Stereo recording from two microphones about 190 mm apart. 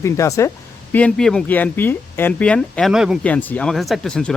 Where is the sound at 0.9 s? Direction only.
5° left (ahead or behind).